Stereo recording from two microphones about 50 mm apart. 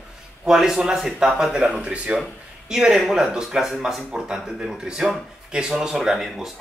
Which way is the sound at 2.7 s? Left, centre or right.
Centre.